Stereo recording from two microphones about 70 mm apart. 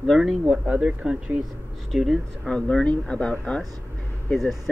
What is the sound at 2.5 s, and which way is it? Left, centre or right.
Speech, centre.